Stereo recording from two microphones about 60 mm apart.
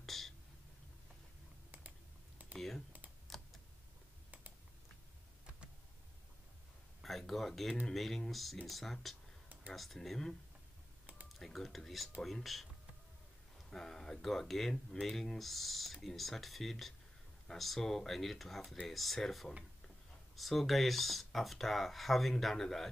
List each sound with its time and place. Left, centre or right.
0.0 s a sound: centre
3.3 s computer keyboard: centre
7.0 s a sound: centre
7.8 s speech: centre
11.3 s speech: centre
13.7 s speech: centre